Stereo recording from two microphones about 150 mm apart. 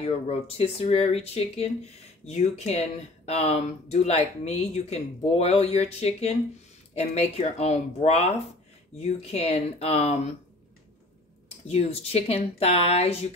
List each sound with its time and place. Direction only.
0.0 s speech: 40° left (ahead or behind)
11.6 s speech: 45° left (ahead or behind)